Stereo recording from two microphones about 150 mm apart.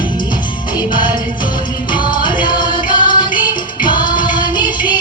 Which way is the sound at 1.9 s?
30° left (ahead or behind).